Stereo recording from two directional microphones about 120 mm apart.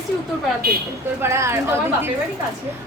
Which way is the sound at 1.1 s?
20° right (ahead or behind).